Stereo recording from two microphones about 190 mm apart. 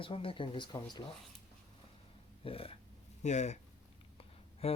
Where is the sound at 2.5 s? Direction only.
30° left (ahead or behind).